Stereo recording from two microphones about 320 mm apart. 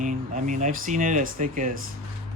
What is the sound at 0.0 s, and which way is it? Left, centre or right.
Speech, right.